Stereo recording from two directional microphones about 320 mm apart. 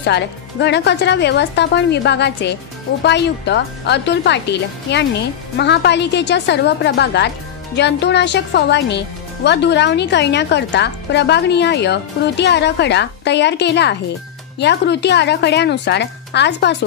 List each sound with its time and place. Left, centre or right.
0.0 s speech: left